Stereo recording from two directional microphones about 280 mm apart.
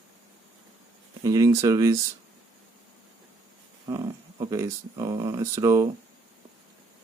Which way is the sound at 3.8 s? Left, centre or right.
Centre.